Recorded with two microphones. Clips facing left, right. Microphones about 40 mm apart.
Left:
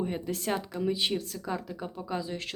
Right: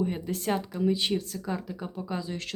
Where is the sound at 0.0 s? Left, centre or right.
Centre.